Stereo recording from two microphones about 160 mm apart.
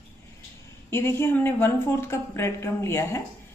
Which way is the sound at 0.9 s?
15° left (ahead or behind).